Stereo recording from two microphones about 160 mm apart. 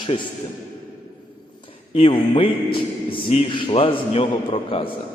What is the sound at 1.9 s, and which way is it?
A man's voice, 35° left (ahead or behind).